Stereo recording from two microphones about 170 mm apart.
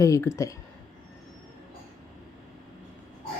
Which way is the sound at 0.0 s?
15° left (ahead or behind).